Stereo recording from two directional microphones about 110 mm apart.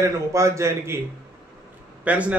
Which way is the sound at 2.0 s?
10° right (ahead or behind).